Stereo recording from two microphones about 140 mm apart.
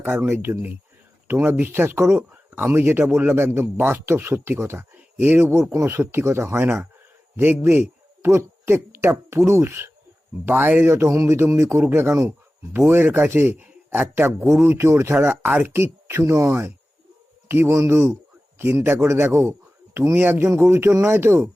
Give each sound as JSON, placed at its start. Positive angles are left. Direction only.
{"t": 0.0, "sound": "speech", "side_deg": -15}